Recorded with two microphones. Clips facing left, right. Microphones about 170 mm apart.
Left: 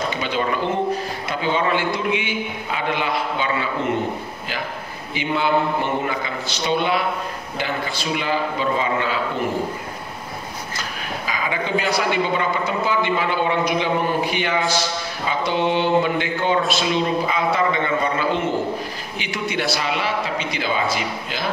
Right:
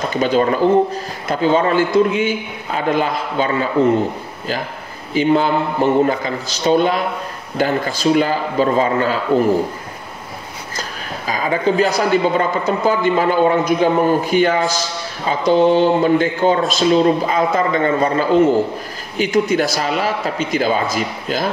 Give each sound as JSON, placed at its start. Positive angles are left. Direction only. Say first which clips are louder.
{"t": 0.1, "sound": "speech", "louder": "right 7 dB", "side_deg": -40}
{"t": 5.1, "sound": "a man's voice", "louder": "right 6 dB", "side_deg": -40}
{"t": 10.8, "sound": "a man's voice", "louder": "right 3 dB", "side_deg": -40}